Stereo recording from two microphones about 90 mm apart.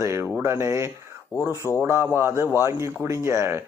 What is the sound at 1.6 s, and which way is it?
Speech, 5° left (ahead or behind).